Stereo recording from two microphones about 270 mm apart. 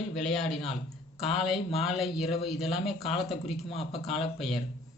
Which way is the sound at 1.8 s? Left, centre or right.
Centre.